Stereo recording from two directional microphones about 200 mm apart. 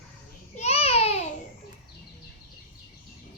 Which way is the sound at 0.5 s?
30° left (ahead or behind).